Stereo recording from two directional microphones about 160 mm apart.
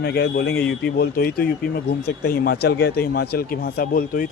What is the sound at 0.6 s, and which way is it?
Speech, 5° left (ahead or behind).